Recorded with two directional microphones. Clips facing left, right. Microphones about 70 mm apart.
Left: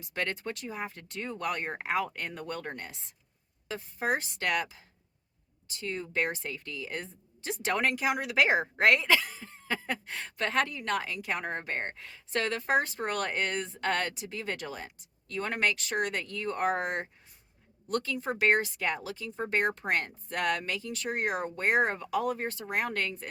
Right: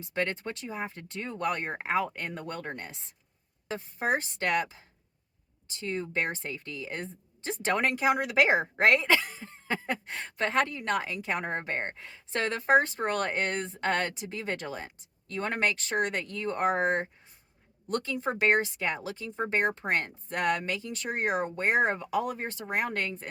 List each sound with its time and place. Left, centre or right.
0.0 s speech: right